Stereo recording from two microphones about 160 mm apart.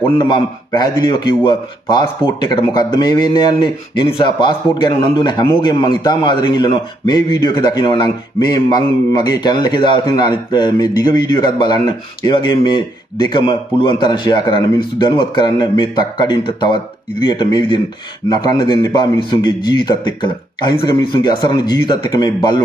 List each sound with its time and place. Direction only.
0.2 s speech: 25° left (ahead or behind)